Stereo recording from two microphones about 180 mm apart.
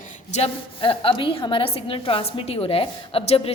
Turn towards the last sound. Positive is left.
turn(degrees=35)  # may be behind; listen again after turning